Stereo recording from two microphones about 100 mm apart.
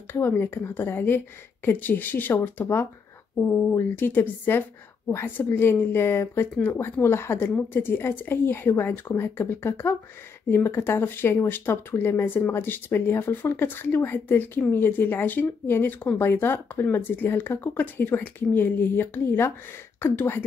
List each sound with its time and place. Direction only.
0.1 s speech: 20° left (ahead or behind)